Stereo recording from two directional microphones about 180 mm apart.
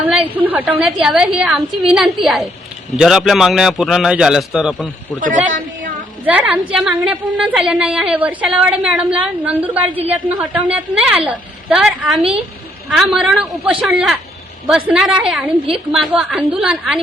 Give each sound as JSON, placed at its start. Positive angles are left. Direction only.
{"t": 0.0, "sound": "a woman's voice", "side_deg": -10}
{"t": 5.2, "sound": "a woman's voice", "side_deg": -45}
{"t": 6.2, "sound": "a woman's voice", "side_deg": -5}